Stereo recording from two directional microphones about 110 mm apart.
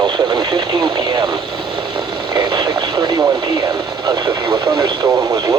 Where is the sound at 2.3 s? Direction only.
40° right (ahead or behind).